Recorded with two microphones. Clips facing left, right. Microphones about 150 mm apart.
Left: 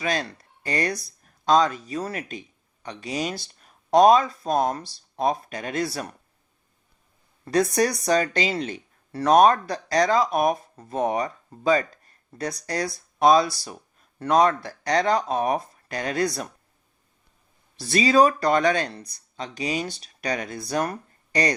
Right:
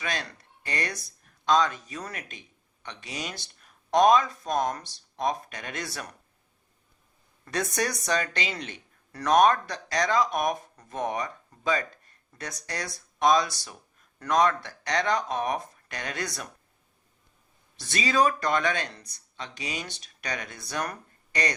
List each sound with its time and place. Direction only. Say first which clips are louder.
0.0 s speech: left 7 dB; 35° left (ahead or behind)
7.4 s speech: left 8 dB; 35° left (ahead or behind)
17.7 s speech: left 7 dB; 35° left (ahead or behind)